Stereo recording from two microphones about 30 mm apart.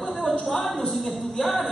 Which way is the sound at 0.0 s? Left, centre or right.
Centre.